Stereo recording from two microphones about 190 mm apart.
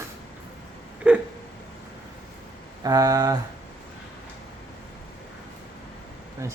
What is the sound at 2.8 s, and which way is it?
Speech, 20° right (ahead or behind).